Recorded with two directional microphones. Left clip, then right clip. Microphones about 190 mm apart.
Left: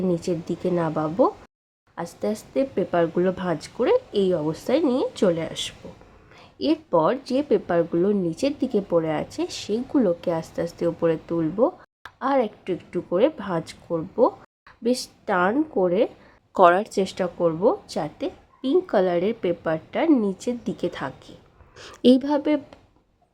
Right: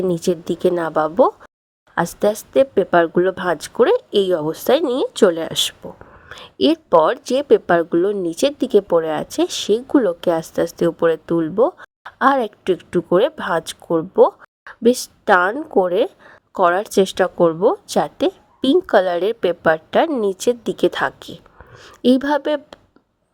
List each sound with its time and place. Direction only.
0.0 s speech: 45° right (ahead or behind)
16.6 s speech: centre (ahead or behind)
16.9 s speech: 45° right (ahead or behind)
21.8 s speech: centre (ahead or behind)
22.2 s speech: 45° right (ahead or behind)